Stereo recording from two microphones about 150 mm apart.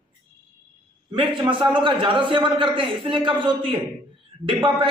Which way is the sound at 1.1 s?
35° right (ahead or behind).